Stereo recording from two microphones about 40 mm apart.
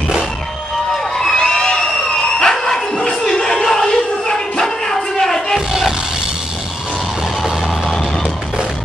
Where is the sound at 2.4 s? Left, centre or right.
Centre.